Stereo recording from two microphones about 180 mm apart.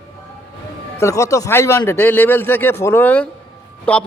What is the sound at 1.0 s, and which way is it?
A man's voice, 15° left (ahead or behind).